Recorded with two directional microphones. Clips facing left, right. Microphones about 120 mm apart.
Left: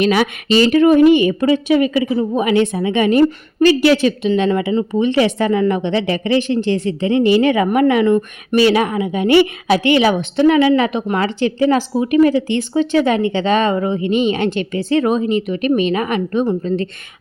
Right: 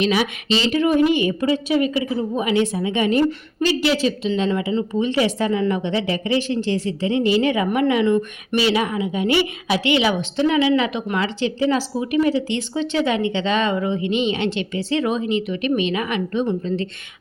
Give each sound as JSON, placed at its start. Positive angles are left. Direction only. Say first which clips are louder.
{"t": 0.0, "sound": "a woman's voice", "louder": "left 5 dB", "side_deg": 55}